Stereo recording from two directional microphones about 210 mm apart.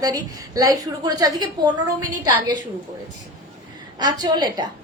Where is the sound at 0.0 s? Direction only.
15° right (ahead or behind).